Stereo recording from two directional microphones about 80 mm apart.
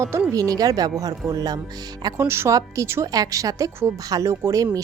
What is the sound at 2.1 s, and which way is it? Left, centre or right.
Speech, right.